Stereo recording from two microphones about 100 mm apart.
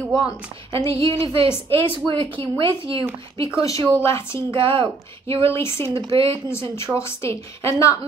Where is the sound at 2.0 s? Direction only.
55° right (ahead or behind).